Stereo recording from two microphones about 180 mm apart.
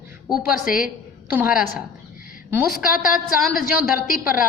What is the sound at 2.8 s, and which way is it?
Speech, 5° right (ahead or behind).